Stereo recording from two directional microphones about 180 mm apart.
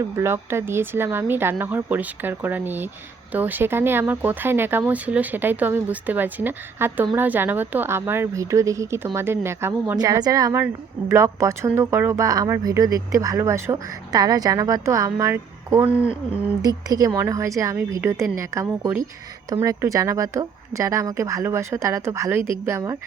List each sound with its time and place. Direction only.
0.2 s speech: 15° right (ahead or behind)